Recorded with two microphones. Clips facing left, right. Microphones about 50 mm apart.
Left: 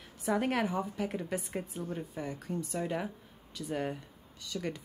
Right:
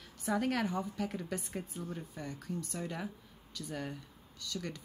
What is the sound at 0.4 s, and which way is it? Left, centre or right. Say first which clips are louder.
Speech: left 1 dB; left.